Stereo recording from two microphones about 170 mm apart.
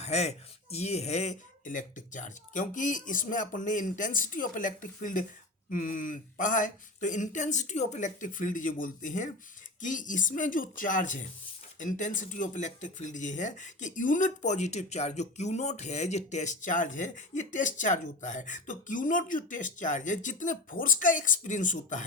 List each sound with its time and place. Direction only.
0.0 s speech: 40° left (ahead or behind)